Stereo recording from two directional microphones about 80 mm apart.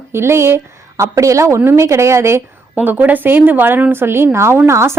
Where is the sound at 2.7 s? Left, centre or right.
Right.